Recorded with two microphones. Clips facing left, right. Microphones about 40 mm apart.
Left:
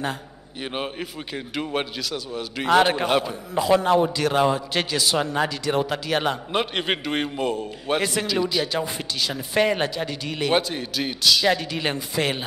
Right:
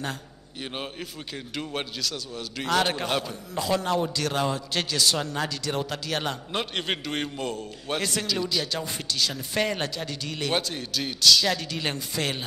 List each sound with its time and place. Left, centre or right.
1.3 s a man's voice: centre